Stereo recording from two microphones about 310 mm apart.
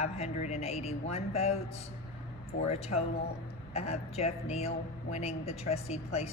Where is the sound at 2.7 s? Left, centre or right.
Left.